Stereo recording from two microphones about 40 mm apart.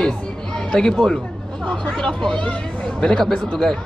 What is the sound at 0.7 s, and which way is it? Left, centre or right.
Speech, centre.